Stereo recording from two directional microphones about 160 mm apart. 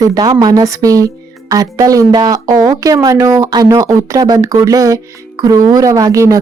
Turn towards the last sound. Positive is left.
turn(degrees=-20)  # may be behind; listen again after turning